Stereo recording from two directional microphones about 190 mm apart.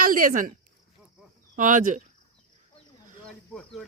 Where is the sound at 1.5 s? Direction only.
45° right (ahead or behind).